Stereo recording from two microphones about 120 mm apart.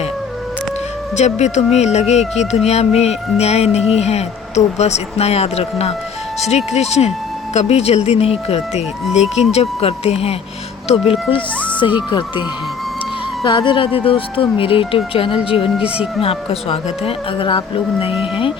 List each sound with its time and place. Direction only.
1.1 s speech: 70° left (ahead or behind); by 12.2 s 40° left (ahead or behind)
13.4 s speech: 40° left (ahead or behind)